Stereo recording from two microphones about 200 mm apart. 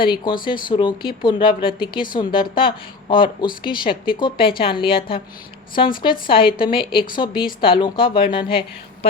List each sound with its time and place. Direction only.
0.0 s speech: 25° left (ahead or behind)